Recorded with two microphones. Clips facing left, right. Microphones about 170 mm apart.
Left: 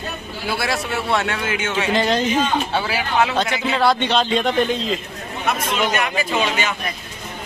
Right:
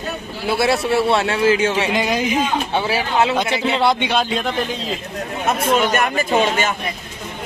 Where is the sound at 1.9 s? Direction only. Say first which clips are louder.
Left 1 dB; 10° right (ahead or behind).